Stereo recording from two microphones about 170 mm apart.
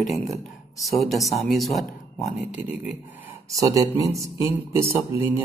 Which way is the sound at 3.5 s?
20° right (ahead or behind).